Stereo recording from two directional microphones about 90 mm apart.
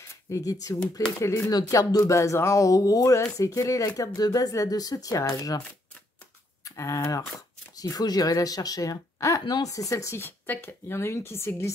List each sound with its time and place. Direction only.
0.1 s speech: 35° left (ahead or behind)
2.1 s speech: 30° left (ahead or behind)
6.6 s speech: 35° left (ahead or behind)